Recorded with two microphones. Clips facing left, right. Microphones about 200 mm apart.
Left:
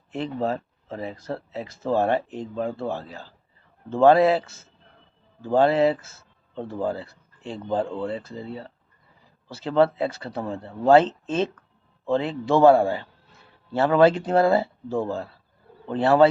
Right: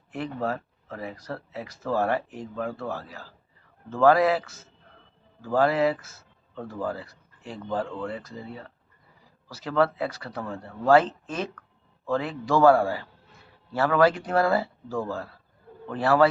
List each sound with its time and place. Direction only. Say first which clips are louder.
0.1 s speech: left 3 dB; 25° left (ahead or behind)